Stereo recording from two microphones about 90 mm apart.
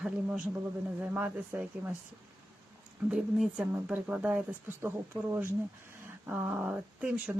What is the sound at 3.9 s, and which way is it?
Speech, 15° right (ahead or behind).